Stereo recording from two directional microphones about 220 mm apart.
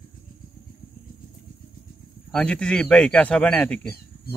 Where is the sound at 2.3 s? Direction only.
5° left (ahead or behind).